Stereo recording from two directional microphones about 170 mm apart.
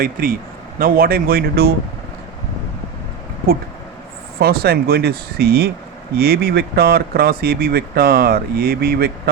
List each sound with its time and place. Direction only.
0.0 s speech: 55° right (ahead or behind)
4.4 s speech: 65° right (ahead or behind)